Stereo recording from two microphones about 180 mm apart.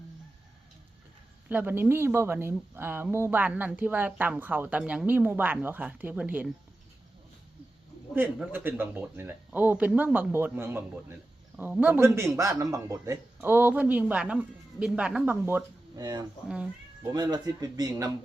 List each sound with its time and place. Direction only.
1.5 s a woman's voice: 10° right (ahead or behind)
8.1 s a woman's voice: 10° right (ahead or behind)
16.0 s speech: 25° right (ahead or behind)
16.5 s speech: 5° right (ahead or behind)
17.1 s speech: 20° right (ahead or behind)